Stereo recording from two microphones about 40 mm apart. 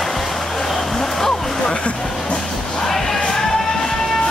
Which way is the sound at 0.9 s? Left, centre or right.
Centre.